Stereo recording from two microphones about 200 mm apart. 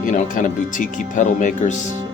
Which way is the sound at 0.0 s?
40° left (ahead or behind).